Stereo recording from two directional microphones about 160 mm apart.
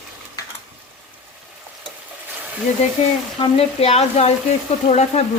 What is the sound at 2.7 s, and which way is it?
Speech, 45° left (ahead or behind).